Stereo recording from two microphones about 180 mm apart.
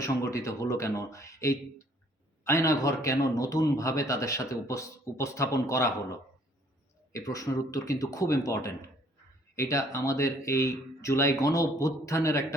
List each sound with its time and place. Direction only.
0.0 s a man's voice: 15° left (ahead or behind)